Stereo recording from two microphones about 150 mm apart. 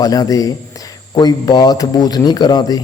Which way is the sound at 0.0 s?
25° left (ahead or behind).